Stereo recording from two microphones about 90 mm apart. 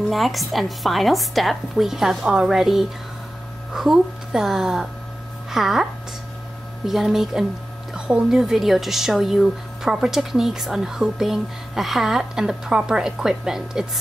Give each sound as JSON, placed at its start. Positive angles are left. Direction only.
{"t": 0.1, "sound": "speech", "side_deg": 0}
{"t": 6.9, "sound": "speech", "side_deg": 0}